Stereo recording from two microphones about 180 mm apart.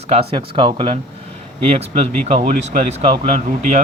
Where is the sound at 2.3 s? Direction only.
45° right (ahead or behind).